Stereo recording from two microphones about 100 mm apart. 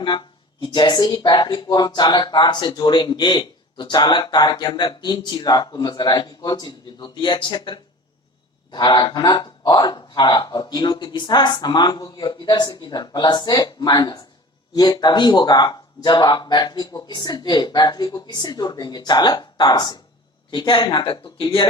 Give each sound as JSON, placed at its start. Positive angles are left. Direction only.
{"t": 0.0, "sound": "speech", "side_deg": 50}